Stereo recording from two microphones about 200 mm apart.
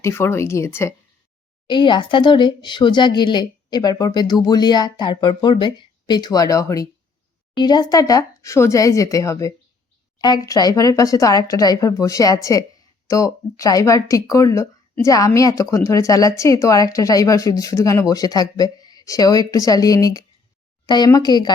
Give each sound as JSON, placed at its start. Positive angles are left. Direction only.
{"t": 0.0, "sound": "speech", "side_deg": 10}